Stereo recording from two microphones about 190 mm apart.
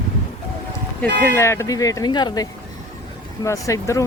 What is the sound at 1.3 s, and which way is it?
Speech, 15° left (ahead or behind).